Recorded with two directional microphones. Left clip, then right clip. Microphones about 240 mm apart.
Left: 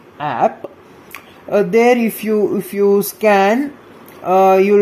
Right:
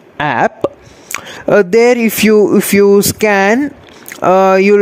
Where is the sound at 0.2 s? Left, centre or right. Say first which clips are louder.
Right 4 dB; right.